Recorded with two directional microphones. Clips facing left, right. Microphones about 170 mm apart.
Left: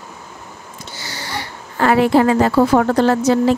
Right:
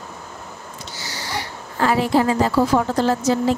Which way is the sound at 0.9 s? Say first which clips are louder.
Left 1 dB; 60° left (ahead or behind).